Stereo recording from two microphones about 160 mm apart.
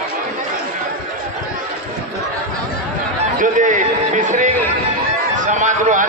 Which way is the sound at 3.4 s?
55° right (ahead or behind).